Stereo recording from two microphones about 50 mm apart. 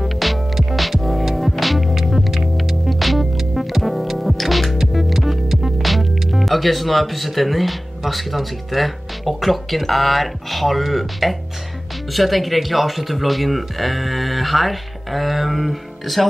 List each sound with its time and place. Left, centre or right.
0.0 s music: centre
12.1 s speech: centre